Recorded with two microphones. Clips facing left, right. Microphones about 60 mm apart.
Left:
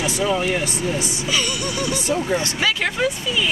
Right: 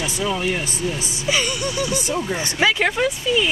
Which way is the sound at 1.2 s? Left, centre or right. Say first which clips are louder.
Right 4 dB; centre.